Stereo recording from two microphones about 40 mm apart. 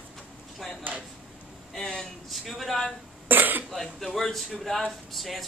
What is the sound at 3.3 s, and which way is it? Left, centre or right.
Speech, right.